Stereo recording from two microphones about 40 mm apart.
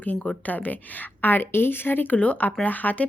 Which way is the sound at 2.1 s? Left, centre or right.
Left.